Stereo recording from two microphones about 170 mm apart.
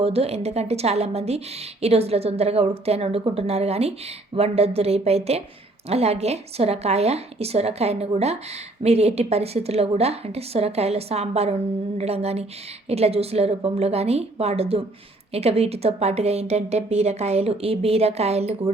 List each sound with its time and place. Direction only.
0.0 s a woman's voice: 35° right (ahead or behind)